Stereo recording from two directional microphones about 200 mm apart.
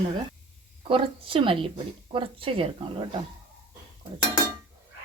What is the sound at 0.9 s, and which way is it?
Speech, 25° right (ahead or behind).